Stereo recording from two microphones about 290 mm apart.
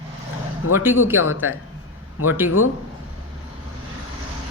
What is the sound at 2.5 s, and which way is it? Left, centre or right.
Speech, left.